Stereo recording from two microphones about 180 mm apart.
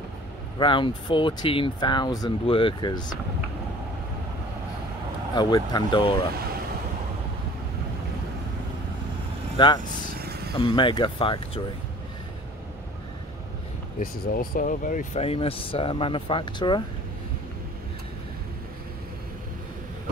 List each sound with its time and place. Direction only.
0.6 s speech: 25° left (ahead or behind)
5.3 s speech: 20° left (ahead or behind)
9.6 s speech: 25° left (ahead or behind)
10.2 s vehicle: 60° right (ahead or behind)
10.5 s speech: 25° left (ahead or behind)
13.9 s speech: 55° left (ahead or behind)
15.1 s speech: 30° left (ahead or behind)